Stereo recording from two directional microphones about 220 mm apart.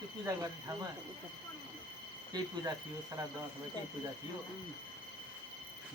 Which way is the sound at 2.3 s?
20° right (ahead or behind).